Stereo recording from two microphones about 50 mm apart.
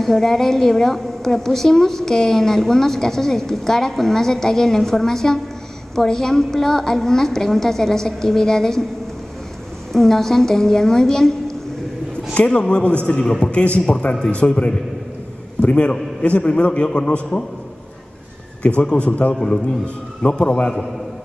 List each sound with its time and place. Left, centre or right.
0.0 s a woman's voice: centre
9.9 s a woman's voice: centre
12.4 s a man's voice: centre
18.8 s a man's voice: left